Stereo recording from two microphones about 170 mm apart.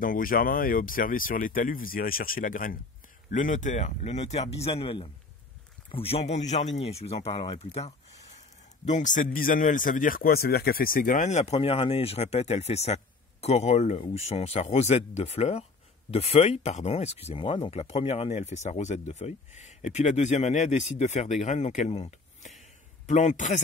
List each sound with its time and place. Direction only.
0.0 s a man's voice: 55° left (ahead or behind)